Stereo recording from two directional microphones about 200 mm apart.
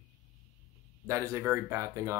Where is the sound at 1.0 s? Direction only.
15° right (ahead or behind).